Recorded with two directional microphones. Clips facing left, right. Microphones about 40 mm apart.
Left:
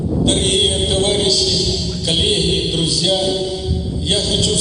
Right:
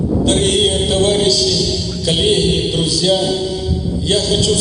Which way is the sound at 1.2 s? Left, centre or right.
Left.